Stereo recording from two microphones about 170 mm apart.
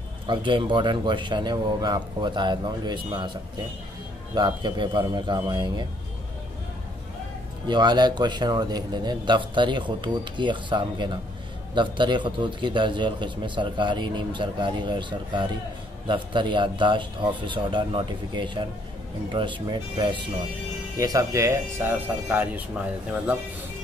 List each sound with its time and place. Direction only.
0.3 s a man's voice: 30° right (ahead or behind)
4.4 s a man's voice: 25° right (ahead or behind)
7.6 s a man's voice: 25° right (ahead or behind); by 23.3 s 10° right (ahead or behind)